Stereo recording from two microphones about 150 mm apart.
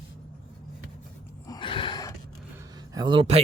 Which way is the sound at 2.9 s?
30° right (ahead or behind).